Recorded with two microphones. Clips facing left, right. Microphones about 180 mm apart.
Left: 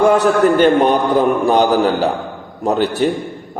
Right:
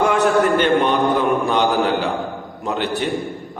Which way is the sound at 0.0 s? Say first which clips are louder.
Left 4 dB; 40° left (ahead or behind).